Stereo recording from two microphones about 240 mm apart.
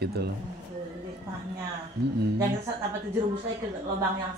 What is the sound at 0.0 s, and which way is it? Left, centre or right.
Speech, right.